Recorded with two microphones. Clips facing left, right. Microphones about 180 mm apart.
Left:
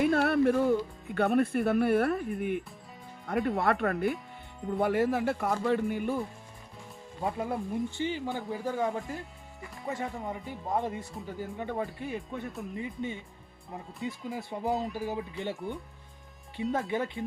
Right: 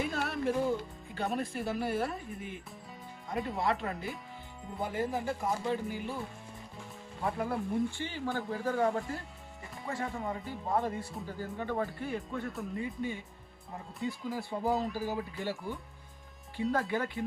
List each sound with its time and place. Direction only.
0.0 s a man's voice: 60° left (ahead or behind)
7.2 s speech: 20° left (ahead or behind)
14.3 s speech: 20° left (ahead or behind)
14.7 s speech: centre (ahead or behind)
15.1 s speech: 20° left (ahead or behind)